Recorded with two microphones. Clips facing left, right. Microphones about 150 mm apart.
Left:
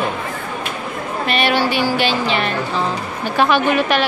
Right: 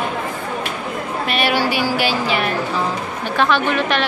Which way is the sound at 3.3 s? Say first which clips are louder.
Left 2 dB; 10° left (ahead or behind).